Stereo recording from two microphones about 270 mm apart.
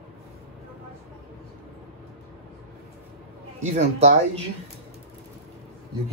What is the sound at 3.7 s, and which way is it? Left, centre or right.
Speech, right.